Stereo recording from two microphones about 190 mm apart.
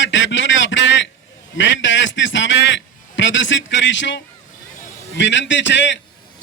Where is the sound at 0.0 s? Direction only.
70° left (ahead or behind).